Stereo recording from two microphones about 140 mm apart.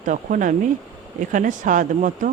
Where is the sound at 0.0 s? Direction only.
70° right (ahead or behind).